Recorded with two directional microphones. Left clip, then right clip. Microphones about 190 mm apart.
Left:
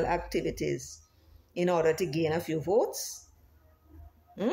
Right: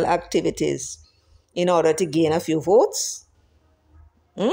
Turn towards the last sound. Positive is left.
turn(degrees=-40)  # may be behind; listen again after turning